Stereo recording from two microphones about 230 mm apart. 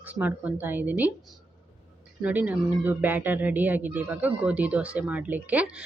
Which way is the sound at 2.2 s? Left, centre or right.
Centre.